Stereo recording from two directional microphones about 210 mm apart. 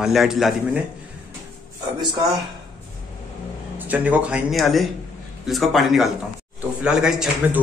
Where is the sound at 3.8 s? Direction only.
5° right (ahead or behind).